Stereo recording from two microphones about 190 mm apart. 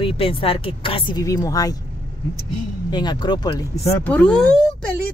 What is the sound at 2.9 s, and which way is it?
Speech, 20° left (ahead or behind).